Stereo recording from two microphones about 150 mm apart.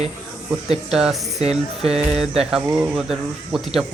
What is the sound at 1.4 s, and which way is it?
Speech, 45° right (ahead or behind).